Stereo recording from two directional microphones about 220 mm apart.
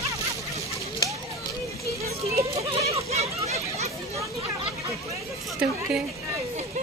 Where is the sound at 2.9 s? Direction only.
30° right (ahead or behind).